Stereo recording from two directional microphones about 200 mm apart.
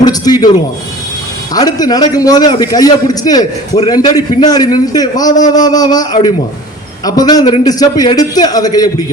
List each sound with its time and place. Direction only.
0.0 s a man's voice: 20° left (ahead or behind)
1.5 s a man's voice: 20° left (ahead or behind)